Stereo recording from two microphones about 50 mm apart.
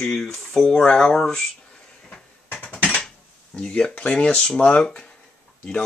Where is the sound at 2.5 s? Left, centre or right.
Left.